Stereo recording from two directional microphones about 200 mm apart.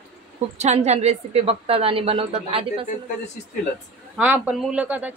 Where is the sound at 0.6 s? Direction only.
35° right (ahead or behind).